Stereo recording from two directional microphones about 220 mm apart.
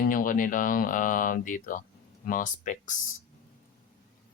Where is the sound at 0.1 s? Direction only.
40° left (ahead or behind).